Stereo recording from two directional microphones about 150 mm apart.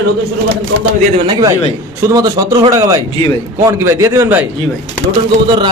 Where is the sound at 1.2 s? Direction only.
25° right (ahead or behind).